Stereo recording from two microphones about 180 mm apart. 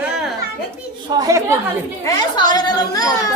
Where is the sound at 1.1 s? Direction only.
20° right (ahead or behind).